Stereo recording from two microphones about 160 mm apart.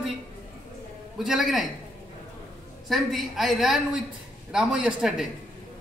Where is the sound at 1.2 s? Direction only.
Centre (ahead or behind).